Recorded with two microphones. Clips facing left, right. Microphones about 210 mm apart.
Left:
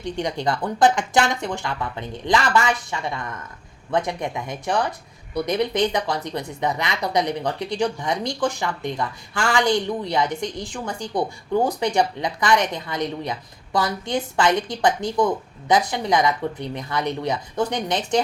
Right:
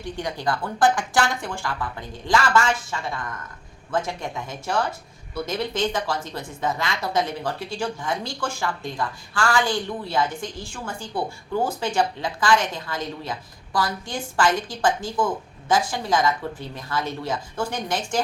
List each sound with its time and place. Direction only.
0.0 s speech: 20° left (ahead or behind)
3.9 s speech: 20° left (ahead or behind)
5.3 s speech: 15° left (ahead or behind)